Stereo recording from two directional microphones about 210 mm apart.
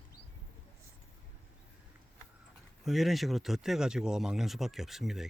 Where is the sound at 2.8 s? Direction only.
Centre (ahead or behind).